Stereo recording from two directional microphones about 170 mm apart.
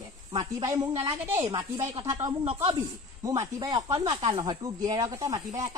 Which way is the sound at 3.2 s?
20° right (ahead or behind).